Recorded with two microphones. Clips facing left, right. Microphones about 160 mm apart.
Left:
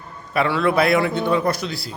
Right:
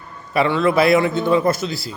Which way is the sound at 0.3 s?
Centre (ahead or behind).